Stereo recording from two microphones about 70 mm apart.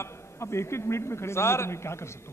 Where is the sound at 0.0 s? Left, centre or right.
Left.